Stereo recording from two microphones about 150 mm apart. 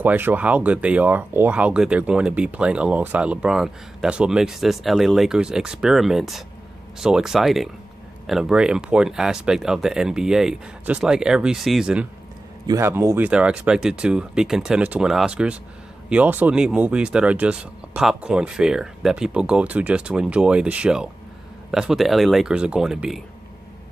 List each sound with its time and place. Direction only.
0.0 s speech: 15° right (ahead or behind)
12.6 s speech: 20° right (ahead or behind); by 23.2 s 5° right (ahead or behind)